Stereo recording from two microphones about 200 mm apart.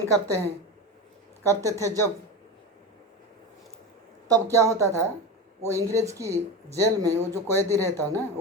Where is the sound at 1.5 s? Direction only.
15° right (ahead or behind).